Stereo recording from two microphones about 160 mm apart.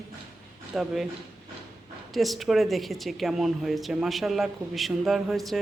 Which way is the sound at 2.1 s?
Centre (ahead or behind).